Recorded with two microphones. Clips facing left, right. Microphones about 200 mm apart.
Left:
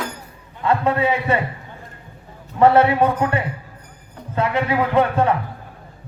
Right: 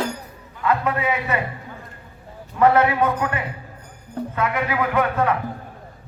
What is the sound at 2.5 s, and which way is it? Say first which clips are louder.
Mantra: left 3 dB; 30° left (ahead or behind).